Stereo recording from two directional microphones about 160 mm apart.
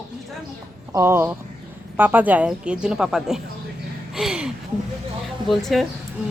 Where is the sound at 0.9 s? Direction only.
15° right (ahead or behind).